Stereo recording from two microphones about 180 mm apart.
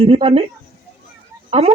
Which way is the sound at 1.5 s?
30° right (ahead or behind).